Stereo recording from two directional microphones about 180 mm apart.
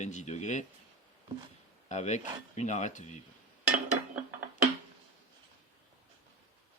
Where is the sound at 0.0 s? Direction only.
40° left (ahead or behind).